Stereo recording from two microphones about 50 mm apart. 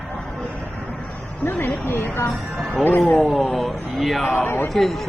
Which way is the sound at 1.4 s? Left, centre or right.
Left.